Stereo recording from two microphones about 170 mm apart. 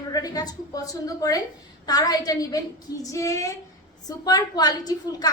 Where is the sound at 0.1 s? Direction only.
20° left (ahead or behind).